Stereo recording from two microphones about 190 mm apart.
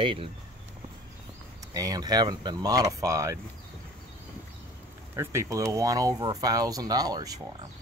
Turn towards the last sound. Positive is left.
turn(degrees=-20)  # may be behind; listen again after turning